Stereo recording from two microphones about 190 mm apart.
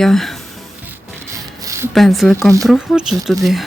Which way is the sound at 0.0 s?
Centre (ahead or behind).